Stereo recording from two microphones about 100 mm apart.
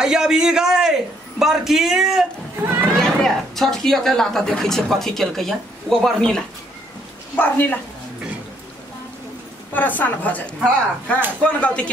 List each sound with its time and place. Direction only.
0.0 s speech: 5° right (ahead or behind)
7.3 s speech: 20° left (ahead or behind)
9.8 s speech: 20° left (ahead or behind)